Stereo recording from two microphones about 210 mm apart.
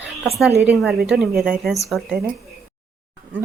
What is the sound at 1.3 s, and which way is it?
Speech, 45° right (ahead or behind).